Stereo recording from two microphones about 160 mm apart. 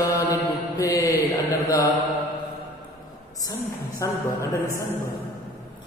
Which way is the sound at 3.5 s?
20° left (ahead or behind).